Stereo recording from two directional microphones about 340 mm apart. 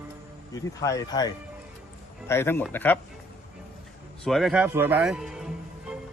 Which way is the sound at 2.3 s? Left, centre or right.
Centre.